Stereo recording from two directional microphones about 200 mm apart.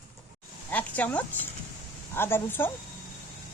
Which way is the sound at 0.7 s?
10° left (ahead or behind).